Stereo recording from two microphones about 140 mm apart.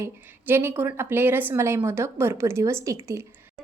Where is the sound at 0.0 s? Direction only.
15° right (ahead or behind).